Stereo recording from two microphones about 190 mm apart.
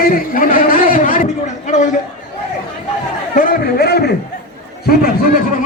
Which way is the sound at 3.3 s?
45° left (ahead or behind).